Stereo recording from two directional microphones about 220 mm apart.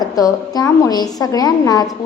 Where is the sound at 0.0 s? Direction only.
15° left (ahead or behind).